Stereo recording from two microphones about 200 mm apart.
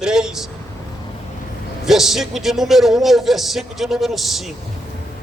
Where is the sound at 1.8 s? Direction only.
Centre (ahead or behind).